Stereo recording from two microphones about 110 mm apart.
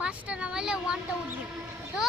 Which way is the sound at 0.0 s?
10° right (ahead or behind).